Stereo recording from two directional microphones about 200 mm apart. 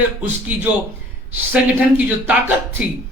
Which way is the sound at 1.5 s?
10° right (ahead or behind).